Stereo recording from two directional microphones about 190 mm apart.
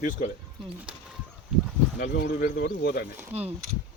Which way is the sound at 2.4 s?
50° left (ahead or behind).